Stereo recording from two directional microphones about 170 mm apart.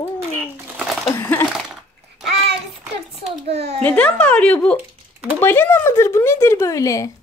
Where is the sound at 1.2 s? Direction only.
15° left (ahead or behind).